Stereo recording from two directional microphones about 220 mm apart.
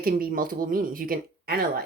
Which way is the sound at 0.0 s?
40° right (ahead or behind).